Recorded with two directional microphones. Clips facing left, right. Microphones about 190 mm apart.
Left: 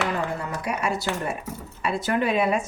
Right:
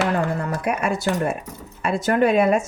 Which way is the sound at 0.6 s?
55° right (ahead or behind).